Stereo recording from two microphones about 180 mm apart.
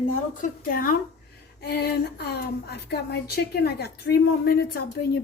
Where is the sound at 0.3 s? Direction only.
50° left (ahead or behind).